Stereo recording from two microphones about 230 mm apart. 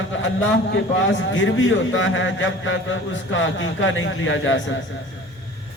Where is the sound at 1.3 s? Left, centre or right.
Left.